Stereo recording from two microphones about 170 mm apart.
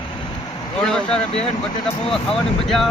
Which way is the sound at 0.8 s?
5° left (ahead or behind).